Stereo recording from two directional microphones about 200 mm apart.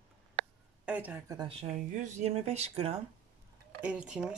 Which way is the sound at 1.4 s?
30° right (ahead or behind).